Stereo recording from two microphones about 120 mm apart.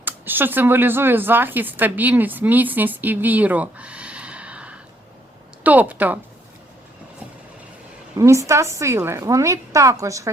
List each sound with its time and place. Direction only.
0.0 s speech: 15° right (ahead or behind)
8.2 s a woman's voice: 25° right (ahead or behind)